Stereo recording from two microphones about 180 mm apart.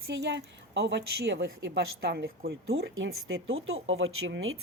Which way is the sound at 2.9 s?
90° right.